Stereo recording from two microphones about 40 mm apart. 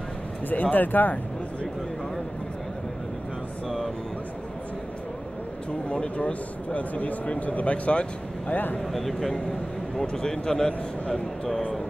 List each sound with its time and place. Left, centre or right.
0.5 s speech: left
3.6 s a sound: centre
5.9 s speech: left
8.9 s speech: centre
10.0 s a man's voice: centre